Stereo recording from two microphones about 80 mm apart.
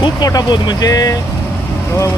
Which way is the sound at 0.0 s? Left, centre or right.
Left.